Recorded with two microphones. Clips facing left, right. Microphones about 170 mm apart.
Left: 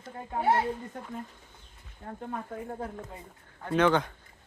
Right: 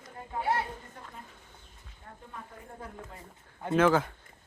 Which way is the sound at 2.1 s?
65° left (ahead or behind).